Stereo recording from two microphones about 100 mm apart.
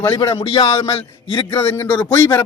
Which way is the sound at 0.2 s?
35° left (ahead or behind).